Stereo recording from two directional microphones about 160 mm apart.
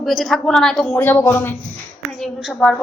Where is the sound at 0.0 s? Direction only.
Centre (ahead or behind).